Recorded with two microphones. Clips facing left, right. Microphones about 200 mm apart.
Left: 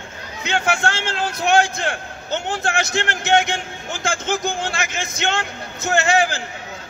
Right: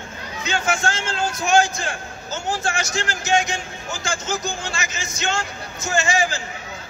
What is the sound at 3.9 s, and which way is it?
A man's voice, 60° left (ahead or behind).